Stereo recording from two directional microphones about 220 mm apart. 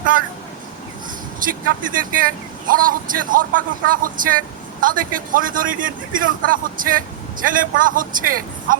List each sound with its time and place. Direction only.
0.1 s speech: 40° right (ahead or behind)
1.4 s speech: 40° right (ahead or behind)